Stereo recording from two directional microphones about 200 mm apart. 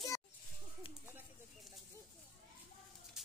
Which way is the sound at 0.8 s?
25° left (ahead or behind).